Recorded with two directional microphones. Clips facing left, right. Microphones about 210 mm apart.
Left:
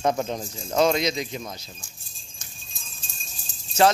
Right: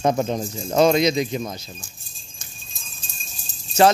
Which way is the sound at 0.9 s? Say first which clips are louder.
Right 6 dB; 10° right (ahead or behind).